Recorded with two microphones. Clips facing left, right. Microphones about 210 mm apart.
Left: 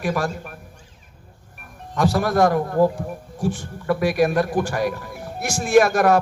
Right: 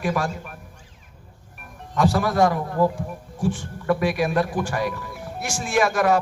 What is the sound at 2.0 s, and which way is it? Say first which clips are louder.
A man's voice: left 1 dB; 40° left (ahead or behind).